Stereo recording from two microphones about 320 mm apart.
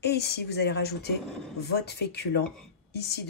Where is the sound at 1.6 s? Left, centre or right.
Left.